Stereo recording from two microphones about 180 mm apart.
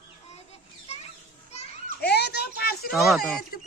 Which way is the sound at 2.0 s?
65° left (ahead or behind).